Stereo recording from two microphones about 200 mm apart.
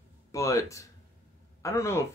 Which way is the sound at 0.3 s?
15° left (ahead or behind).